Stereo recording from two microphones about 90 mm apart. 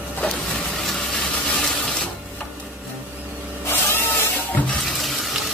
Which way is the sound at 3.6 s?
25° left (ahead or behind).